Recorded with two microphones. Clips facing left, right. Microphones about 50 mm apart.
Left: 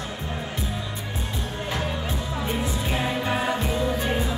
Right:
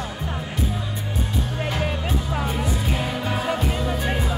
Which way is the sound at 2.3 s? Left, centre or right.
Right.